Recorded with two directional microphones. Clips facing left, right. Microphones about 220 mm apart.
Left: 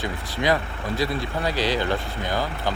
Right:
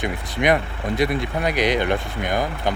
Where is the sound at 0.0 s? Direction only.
20° right (ahead or behind).